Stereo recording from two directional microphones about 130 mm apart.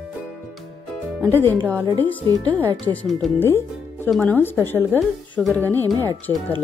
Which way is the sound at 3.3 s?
15° left (ahead or behind).